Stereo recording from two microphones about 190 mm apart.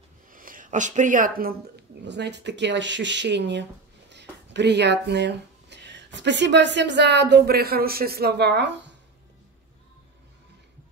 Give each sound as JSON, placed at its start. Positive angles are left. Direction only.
{"t": 0.3, "sound": "speech", "side_deg": -45}